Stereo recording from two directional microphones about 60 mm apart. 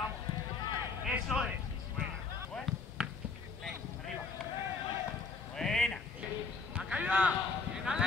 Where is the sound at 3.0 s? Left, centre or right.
Centre.